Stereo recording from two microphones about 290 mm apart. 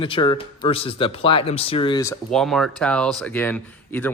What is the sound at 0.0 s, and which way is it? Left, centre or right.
Speech, centre.